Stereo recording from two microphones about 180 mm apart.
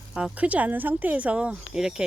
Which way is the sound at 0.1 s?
5° right (ahead or behind).